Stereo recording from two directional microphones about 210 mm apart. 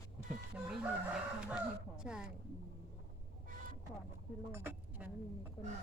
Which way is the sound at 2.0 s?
5° right (ahead or behind).